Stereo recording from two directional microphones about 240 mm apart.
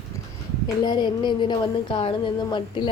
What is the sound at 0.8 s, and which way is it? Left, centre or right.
Speech, centre.